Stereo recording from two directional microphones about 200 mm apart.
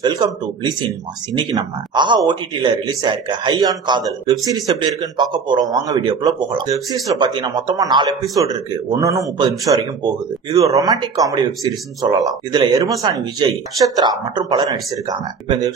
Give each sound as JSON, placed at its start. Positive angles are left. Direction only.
{"t": 0.0, "sound": "speech", "side_deg": -20}